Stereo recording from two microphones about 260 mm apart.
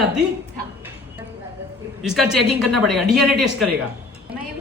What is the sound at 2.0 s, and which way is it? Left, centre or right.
Speech, centre.